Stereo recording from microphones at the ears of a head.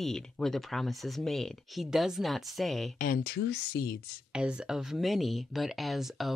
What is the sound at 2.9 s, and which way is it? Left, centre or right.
Speech, left.